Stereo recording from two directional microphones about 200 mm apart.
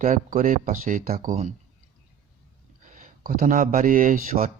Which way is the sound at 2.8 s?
45° right (ahead or behind).